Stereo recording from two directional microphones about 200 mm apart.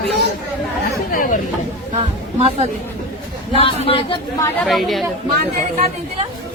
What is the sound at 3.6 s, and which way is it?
Speech, 30° left (ahead or behind).